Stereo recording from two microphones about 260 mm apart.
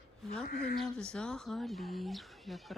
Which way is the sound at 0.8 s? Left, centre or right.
Centre.